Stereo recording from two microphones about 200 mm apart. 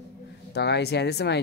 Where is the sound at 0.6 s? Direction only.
55° left (ahead or behind).